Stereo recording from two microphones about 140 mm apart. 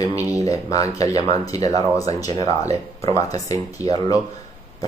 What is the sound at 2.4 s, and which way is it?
Speech, 50° right (ahead or behind).